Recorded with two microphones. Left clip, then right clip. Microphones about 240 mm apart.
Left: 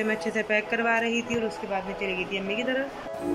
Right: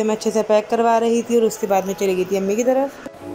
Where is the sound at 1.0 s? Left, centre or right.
Right.